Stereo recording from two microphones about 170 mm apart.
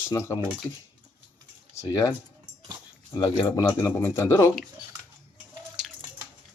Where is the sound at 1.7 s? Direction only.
20° left (ahead or behind).